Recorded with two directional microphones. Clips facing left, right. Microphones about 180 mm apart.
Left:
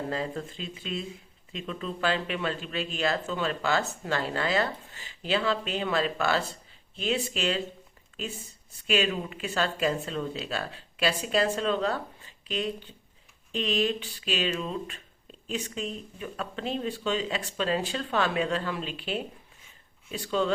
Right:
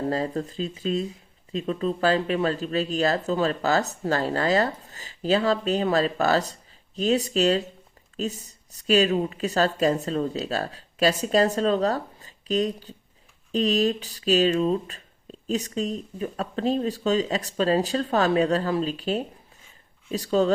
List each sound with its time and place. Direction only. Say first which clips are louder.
0.1 s speech: right 5 dB; 40° right (ahead or behind)